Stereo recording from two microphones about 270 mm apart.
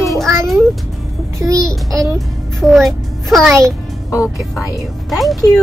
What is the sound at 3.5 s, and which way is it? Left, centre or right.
Speech, centre.